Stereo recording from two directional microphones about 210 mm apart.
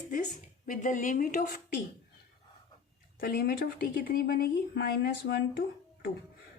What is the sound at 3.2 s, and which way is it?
Speech, 45° left (ahead or behind).